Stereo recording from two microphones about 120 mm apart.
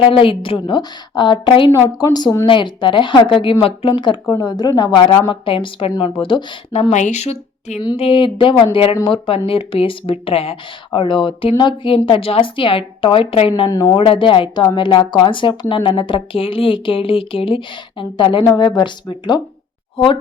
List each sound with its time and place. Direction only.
0.0 s a woman's voice: 50° left (ahead or behind)
6.9 s speech: 80° left
7.9 s speech: 50° left (ahead or behind)
13.7 s speech: 30° left (ahead or behind)
13.9 s a woman's voice: 50° left (ahead or behind)